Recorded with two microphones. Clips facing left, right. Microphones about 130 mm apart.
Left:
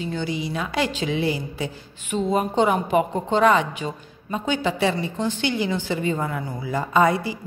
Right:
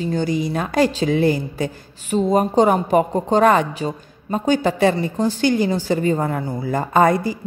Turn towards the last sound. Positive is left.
turn(degrees=-45)  # may be behind; listen again after turning